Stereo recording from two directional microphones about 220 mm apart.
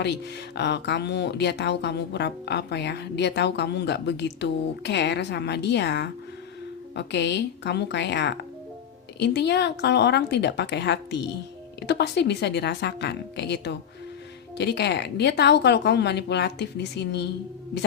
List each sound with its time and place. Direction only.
0.0 s speech: 50° left (ahead or behind)